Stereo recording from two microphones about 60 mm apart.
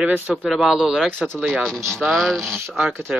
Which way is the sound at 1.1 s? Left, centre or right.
Centre.